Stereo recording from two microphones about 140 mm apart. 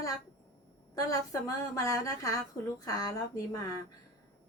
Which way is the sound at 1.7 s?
25° left (ahead or behind).